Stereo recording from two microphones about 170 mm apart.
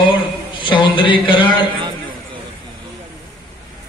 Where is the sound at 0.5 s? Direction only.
30° left (ahead or behind).